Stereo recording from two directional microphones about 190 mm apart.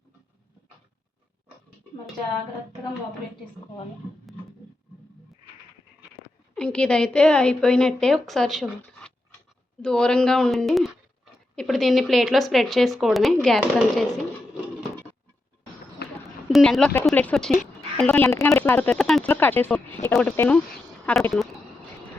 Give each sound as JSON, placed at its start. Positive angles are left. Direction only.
{"t": 6.5, "sound": "a woman's voice", "side_deg": 5}
{"t": 16.0, "sound": "a sound", "side_deg": 55}
{"t": 16.5, "sound": "a woman's voice", "side_deg": 0}